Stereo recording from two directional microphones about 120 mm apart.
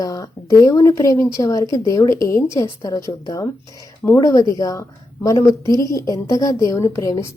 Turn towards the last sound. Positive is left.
turn(degrees=25)  # may be behind; listen again after turning